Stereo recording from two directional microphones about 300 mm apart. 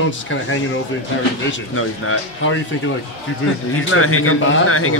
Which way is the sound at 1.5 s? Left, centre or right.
Left.